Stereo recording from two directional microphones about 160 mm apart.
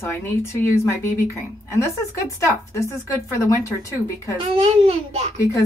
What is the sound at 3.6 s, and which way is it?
Speech, 20° left (ahead or behind).